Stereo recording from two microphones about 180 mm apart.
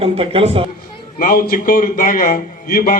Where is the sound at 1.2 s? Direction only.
55° left (ahead or behind).